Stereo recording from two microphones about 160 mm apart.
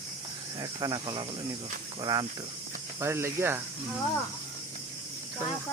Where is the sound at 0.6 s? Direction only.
25° right (ahead or behind).